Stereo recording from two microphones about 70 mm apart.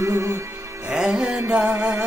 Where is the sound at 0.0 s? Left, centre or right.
Right.